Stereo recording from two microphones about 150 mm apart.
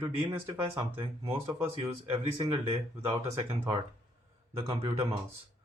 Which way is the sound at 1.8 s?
35° right (ahead or behind).